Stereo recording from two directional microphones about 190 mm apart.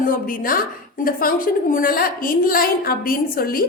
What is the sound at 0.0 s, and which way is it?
A woman's voice, 45° left (ahead or behind).